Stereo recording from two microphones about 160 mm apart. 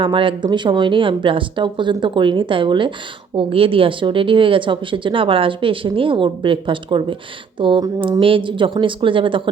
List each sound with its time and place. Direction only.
0.0 s speech: 30° right (ahead or behind)